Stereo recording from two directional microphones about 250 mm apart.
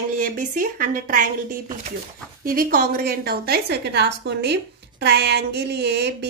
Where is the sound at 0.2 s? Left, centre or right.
Right.